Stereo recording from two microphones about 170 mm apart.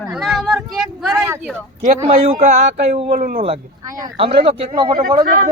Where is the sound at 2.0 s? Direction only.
40° right (ahead or behind).